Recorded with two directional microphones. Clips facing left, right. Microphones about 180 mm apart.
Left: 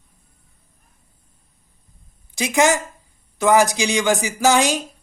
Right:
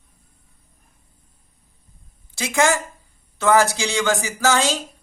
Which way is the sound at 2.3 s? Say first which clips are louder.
Left 2 dB; 15° left (ahead or behind).